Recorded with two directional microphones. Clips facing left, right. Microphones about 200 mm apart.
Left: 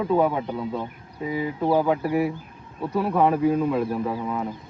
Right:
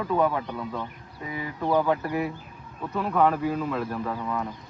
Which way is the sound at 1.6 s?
10° left (ahead or behind).